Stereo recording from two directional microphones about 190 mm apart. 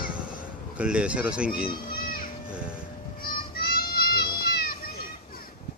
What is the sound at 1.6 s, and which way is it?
Children playing, 50° left (ahead or behind).